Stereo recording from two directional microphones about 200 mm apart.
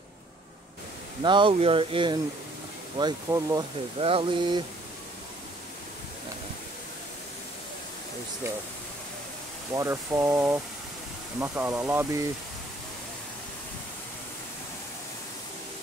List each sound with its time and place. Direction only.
1.2 s speech: 25° right (ahead or behind)
4.0 s speech: 25° right (ahead or behind)
9.8 s speech: 15° right (ahead or behind)